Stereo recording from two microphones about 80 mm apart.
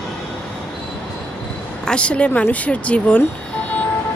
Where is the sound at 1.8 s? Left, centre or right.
Centre.